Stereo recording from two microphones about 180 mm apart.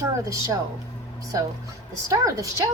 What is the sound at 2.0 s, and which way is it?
Speech, 20° right (ahead or behind).